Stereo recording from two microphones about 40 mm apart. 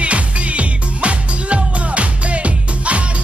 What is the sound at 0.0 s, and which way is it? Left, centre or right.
Music, right.